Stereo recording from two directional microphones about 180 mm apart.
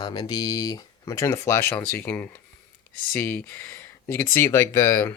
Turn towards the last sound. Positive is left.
turn(degrees=15)  # may be behind; listen again after turning